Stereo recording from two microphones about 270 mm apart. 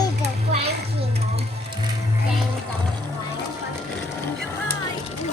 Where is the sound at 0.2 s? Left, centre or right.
Right.